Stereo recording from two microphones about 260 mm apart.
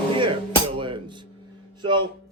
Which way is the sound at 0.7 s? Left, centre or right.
Centre.